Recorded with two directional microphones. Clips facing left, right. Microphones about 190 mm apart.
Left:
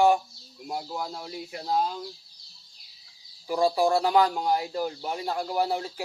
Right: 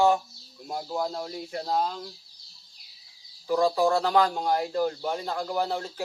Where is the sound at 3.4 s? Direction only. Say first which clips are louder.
Right 1 dB; 15° left (ahead or behind).